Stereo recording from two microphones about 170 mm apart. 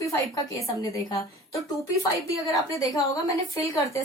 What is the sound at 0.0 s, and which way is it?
A woman's voice, 20° left (ahead or behind).